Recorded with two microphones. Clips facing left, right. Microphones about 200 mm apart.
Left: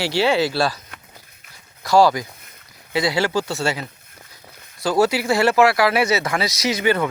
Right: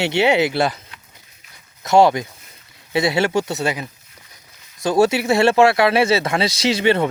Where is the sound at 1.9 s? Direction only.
25° right (ahead or behind).